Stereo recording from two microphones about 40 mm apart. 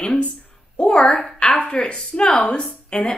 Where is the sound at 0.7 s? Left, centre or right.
Left.